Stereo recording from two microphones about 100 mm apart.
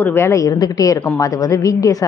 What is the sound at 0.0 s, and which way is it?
A woman's voice, 25° left (ahead or behind).